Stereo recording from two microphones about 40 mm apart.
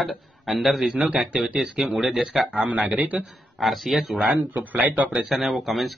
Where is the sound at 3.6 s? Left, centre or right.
Centre.